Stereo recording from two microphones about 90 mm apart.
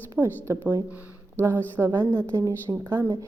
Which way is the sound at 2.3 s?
35° right (ahead or behind).